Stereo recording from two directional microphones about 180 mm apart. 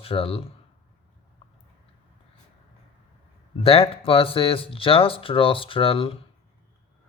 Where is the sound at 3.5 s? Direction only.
30° left (ahead or behind).